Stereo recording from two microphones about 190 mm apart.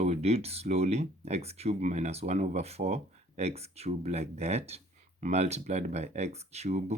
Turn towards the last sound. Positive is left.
turn(degrees=-35)  # may be behind; listen again after turning